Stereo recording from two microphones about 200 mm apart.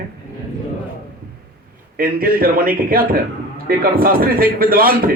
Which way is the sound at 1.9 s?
45° right (ahead or behind).